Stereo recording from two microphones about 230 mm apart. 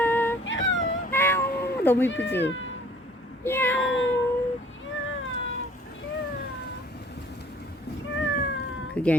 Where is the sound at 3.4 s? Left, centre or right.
Centre.